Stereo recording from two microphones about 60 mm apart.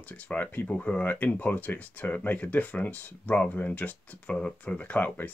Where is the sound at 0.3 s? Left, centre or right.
Left.